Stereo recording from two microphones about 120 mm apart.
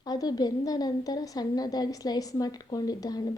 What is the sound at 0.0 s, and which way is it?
A woman's voice, 35° left (ahead or behind).